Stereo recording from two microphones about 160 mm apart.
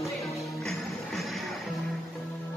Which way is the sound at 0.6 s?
Centre (ahead or behind).